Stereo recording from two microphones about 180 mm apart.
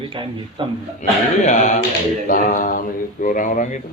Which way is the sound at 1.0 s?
40° left (ahead or behind).